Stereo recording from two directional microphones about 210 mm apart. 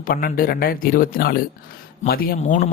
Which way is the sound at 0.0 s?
45° left (ahead or behind).